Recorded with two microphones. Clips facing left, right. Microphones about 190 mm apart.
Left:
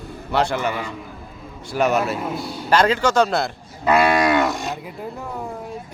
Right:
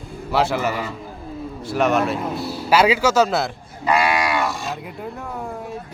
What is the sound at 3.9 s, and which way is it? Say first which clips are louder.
Cattle: left 3 dB; 55° left (ahead or behind).